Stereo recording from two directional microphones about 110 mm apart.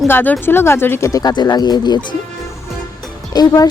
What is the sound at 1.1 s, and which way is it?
Speech, 35° left (ahead or behind).